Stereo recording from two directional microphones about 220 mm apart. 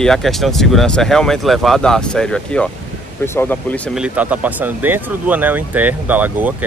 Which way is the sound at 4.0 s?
5° right (ahead or behind).